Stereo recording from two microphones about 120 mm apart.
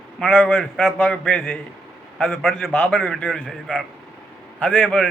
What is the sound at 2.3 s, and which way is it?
A man's voice, 5° right (ahead or behind).